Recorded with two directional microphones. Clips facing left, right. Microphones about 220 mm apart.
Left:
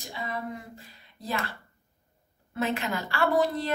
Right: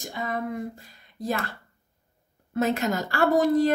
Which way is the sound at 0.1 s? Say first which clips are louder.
Right 4 dB; 45° right (ahead or behind).